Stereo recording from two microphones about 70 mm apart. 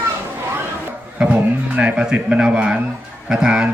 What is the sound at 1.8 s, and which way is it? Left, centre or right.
A man's voice, centre.